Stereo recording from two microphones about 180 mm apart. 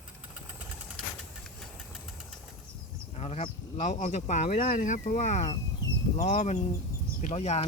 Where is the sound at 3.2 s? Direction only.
35° left (ahead or behind).